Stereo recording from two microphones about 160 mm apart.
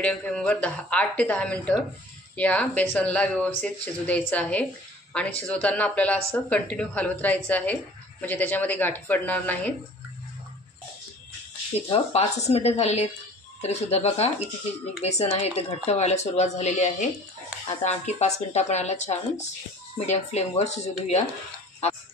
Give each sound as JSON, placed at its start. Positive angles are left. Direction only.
{"t": 0.0, "sound": "a woman's voice", "side_deg": 5}
{"t": 11.9, "sound": "speech", "side_deg": 40}